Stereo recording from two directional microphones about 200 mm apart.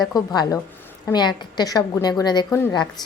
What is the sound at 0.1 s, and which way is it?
A woman's voice, 20° left (ahead or behind).